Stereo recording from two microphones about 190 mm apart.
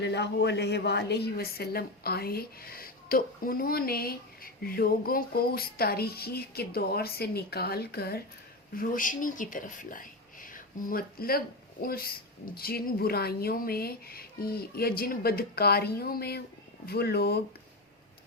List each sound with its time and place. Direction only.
0.0 s speech: 65° left (ahead or behind)